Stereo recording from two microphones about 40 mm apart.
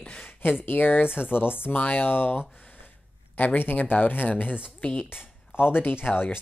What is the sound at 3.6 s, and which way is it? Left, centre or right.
Speech, left.